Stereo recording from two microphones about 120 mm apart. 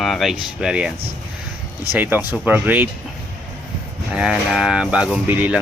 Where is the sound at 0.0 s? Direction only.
Centre (ahead or behind).